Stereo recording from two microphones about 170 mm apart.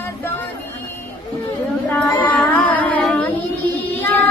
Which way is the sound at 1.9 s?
10° left (ahead or behind).